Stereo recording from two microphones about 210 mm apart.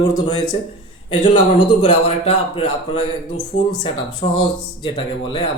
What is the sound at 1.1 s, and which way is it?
A man's voice, 25° left (ahead or behind).